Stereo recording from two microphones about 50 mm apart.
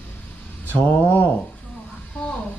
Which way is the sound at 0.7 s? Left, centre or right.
Left.